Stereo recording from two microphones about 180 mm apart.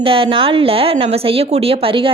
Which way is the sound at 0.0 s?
30° right (ahead or behind).